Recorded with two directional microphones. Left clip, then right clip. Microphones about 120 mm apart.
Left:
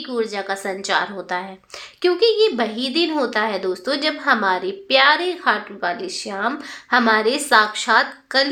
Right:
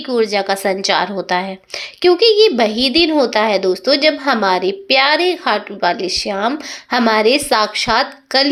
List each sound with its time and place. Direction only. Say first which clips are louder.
0.1 s a woman's voice: right 8 dB; 35° right (ahead or behind)